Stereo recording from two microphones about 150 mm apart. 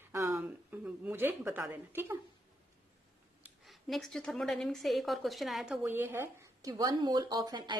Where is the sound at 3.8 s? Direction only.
Centre (ahead or behind); by 7.7 s 30° right (ahead or behind).